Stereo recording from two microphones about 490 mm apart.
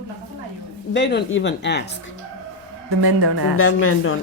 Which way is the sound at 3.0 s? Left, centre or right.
Right.